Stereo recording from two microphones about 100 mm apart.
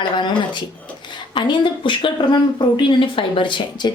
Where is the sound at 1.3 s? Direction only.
55° left (ahead or behind).